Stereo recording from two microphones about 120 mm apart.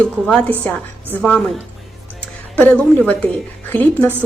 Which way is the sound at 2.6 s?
10° left (ahead or behind).